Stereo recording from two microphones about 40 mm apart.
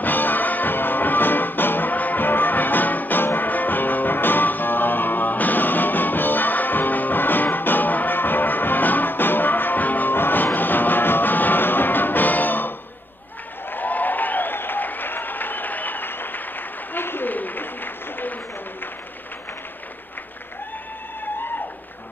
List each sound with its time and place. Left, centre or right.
0.0 s music: left
10.1 s music: left
13.7 s applause: left
17.3 s a sound: left